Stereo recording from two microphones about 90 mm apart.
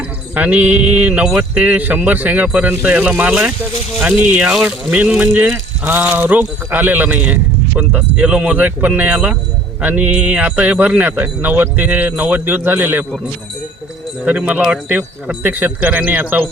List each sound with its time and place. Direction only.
0.3 s speech: 15° right (ahead or behind)
14.3 s speech: 15° right (ahead or behind)